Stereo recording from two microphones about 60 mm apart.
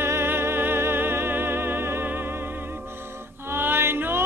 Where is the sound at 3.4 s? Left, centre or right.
Right.